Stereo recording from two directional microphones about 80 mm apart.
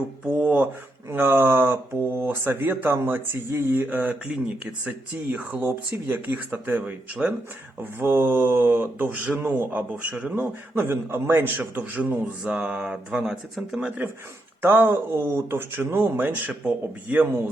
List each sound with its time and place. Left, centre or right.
0.3 s speech: right
11.8 s speech: centre
14.6 s speech: right